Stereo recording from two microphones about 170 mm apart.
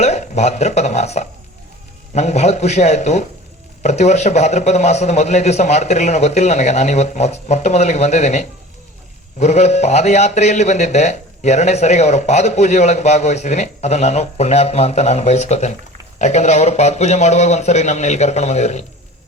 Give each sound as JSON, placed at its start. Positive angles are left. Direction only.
{"t": 0.0, "sound": "a man's voice", "side_deg": 40}